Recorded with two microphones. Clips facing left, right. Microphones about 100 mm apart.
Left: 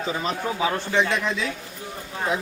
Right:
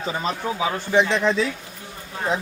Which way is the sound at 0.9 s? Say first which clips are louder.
Right 5 dB; 20° right (ahead or behind).